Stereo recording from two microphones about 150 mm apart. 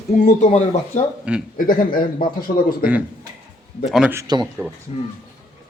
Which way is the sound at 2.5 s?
60° left (ahead or behind).